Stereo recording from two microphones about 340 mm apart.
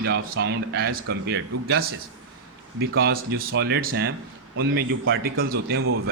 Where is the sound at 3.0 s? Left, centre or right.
Right.